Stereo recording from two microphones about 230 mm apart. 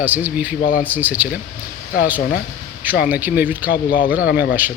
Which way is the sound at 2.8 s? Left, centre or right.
Centre.